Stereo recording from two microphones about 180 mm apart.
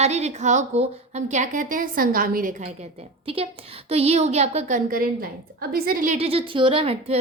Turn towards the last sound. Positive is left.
turn(degrees=-30)  # may be behind; listen again after turning